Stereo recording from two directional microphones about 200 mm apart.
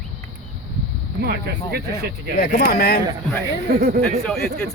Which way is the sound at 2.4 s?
50° left (ahead or behind).